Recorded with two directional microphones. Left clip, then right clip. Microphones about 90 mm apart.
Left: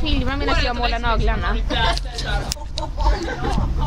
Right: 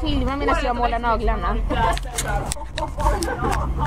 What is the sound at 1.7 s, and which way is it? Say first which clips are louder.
Speech: left 1 dB; 25° left (ahead or behind).